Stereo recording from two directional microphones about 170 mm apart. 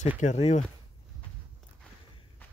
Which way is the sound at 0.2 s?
40° left (ahead or behind).